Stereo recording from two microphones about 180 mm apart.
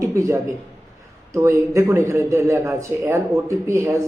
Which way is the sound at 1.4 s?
15° right (ahead or behind).